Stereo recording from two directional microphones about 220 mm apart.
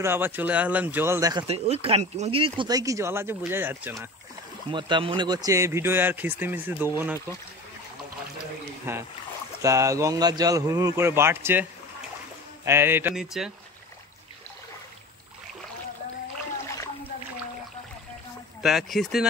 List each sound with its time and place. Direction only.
0.0 s speech: 10° right (ahead or behind)
1.5 s speech: 25° right (ahead or behind); by 3.9 s 10° right (ahead or behind)
4.6 s speech: 20° right (ahead or behind)
8.9 s speech: 10° right (ahead or behind)
12.6 s speech: 10° right (ahead or behind)
16.7 s a sound: 15° left (ahead or behind)
18.6 s speech: centre (ahead or behind)